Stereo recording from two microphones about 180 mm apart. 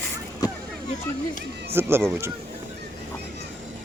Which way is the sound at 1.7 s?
15° right (ahead or behind).